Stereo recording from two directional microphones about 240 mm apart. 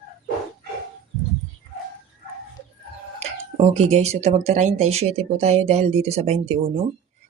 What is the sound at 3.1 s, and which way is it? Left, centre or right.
Speech, right.